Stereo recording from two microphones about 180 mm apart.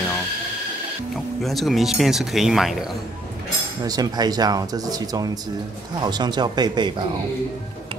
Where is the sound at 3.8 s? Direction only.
20° right (ahead or behind).